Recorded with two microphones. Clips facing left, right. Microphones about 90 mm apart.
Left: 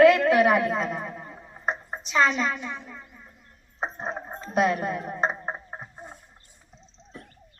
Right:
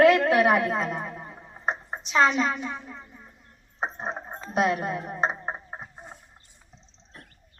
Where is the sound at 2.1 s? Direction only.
35° right (ahead or behind).